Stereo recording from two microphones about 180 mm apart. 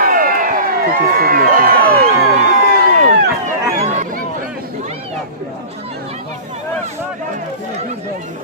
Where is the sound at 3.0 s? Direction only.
40° right (ahead or behind).